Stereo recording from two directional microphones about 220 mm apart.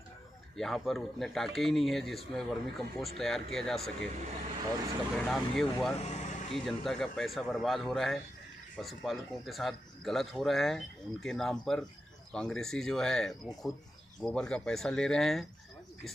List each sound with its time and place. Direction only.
0.6 s speech: centre (ahead or behind)
5.1 s speech: centre (ahead or behind)
5.9 s vehicle: 30° left (ahead or behind)
6.5 s speech: centre (ahead or behind)